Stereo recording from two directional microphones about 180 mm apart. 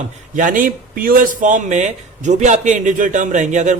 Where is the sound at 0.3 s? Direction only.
50° right (ahead or behind).